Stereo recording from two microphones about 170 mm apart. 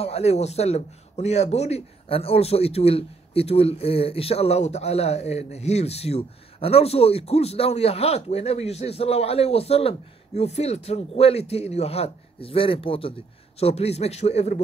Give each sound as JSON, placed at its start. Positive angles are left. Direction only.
{"t": 0.0, "sound": "speech", "side_deg": 40}